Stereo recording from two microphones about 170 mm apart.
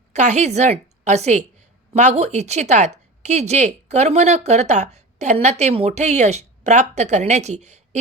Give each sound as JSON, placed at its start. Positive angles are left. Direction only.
{"t": 0.1, "sound": "a woman's voice", "side_deg": -45}